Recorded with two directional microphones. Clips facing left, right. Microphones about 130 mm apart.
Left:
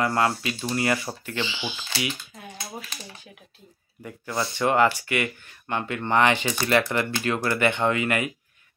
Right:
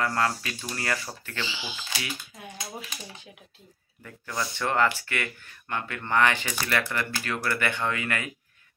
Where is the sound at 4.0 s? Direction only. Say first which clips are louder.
Left 4 dB; 20° left (ahead or behind).